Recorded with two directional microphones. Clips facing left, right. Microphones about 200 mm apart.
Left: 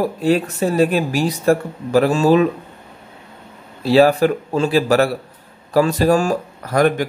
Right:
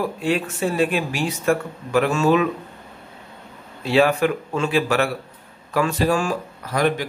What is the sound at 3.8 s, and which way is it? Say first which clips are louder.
Speech: left 5 dB; 35° left (ahead or behind).